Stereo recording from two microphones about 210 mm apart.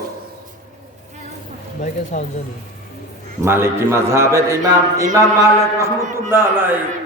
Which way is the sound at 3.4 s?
10° right (ahead or behind).